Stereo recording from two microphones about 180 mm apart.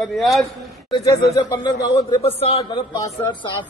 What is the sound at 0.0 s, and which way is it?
Speech, centre (ahead or behind).